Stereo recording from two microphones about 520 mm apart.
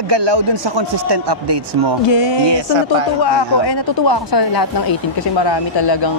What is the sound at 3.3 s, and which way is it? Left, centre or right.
Speech, left.